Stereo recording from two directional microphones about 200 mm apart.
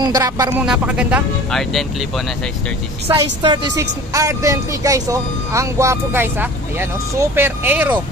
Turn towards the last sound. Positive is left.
turn(degrees=-10)  # may be behind; listen again after turning